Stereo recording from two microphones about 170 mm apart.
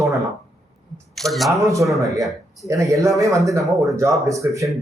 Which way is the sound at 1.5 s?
20° right (ahead or behind).